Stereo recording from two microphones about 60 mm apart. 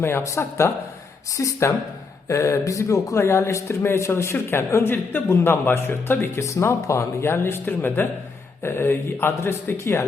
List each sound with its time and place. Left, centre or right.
0.0 s speech: left
0.3 s speech: left
6.4 s speech: left